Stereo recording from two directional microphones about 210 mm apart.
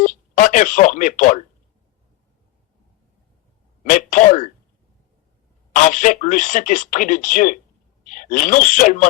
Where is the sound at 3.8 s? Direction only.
40° left (ahead or behind).